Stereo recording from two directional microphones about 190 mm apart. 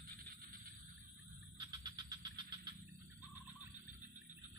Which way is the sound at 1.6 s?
20° right (ahead or behind).